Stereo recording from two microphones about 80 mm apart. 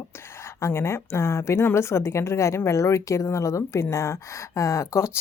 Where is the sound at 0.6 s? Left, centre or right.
Left.